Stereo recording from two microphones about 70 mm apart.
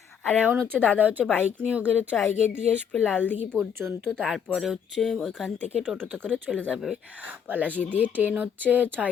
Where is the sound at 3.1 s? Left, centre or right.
Left.